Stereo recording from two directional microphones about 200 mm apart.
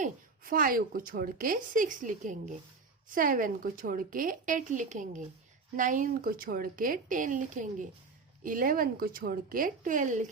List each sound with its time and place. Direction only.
0.0 s a woman's voice: 45° right (ahead or behind)